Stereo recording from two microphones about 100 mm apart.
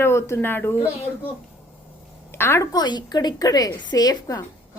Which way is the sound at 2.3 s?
25° left (ahead or behind).